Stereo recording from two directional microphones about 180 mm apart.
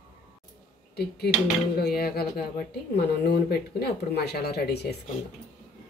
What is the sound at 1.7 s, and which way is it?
Speech, 60° left (ahead or behind).